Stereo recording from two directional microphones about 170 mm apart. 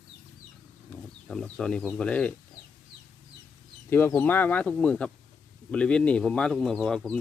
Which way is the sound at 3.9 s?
10° left (ahead or behind).